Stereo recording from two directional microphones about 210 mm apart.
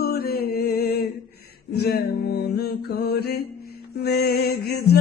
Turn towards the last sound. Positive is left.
turn(degrees=50)  # may be behind; listen again after turning